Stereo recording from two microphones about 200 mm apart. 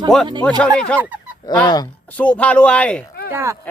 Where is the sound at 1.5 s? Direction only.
20° left (ahead or behind).